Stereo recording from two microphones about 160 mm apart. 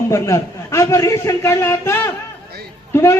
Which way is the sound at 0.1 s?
20° left (ahead or behind).